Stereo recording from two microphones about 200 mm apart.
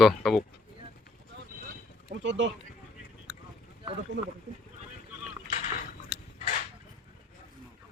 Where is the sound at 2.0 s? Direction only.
65° right (ahead or behind).